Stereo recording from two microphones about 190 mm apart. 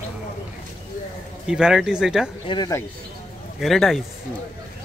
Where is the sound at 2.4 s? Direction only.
25° left (ahead or behind).